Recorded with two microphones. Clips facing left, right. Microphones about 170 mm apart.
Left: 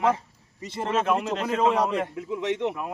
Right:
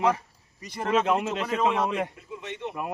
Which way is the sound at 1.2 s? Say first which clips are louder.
Left 2 dB; 35° left (ahead or behind).